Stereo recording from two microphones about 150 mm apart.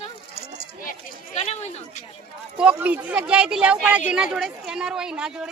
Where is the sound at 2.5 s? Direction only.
10° right (ahead or behind).